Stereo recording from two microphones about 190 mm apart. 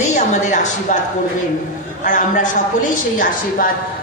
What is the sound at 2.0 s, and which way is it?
A woman's voice, 45° left (ahead or behind).